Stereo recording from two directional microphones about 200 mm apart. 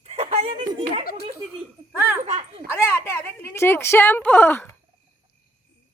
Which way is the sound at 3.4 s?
10° left (ahead or behind).